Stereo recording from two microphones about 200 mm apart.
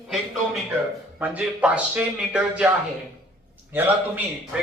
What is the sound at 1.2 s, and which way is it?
A man's voice, 5° right (ahead or behind).